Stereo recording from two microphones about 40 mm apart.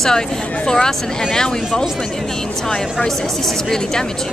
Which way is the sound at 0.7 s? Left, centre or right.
Centre.